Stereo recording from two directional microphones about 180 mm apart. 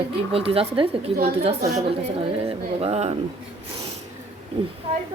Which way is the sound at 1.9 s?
30° right (ahead or behind).